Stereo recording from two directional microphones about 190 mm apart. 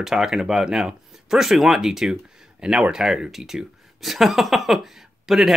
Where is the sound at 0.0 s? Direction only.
Centre (ahead or behind).